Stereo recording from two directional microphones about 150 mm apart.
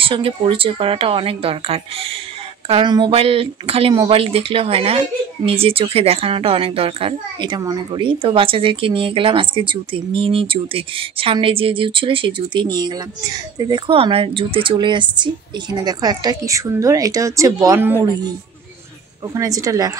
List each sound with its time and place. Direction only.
0.0 s speech: 35° right (ahead or behind); by 17.9 s 20° right (ahead or behind)
19.3 s a woman's voice: 20° right (ahead or behind)